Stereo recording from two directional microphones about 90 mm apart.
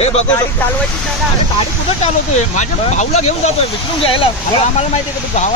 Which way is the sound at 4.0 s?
90° left.